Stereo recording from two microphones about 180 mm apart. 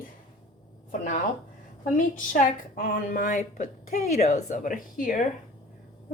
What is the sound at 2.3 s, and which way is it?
A woman's voice, 50° left (ahead or behind).